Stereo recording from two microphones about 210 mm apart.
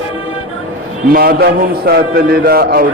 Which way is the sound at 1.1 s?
50° right (ahead or behind).